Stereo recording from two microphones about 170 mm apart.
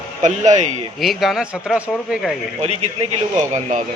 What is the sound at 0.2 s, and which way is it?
Speech, 45° right (ahead or behind).